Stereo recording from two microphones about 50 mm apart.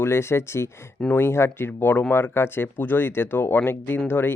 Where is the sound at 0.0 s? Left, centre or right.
Left.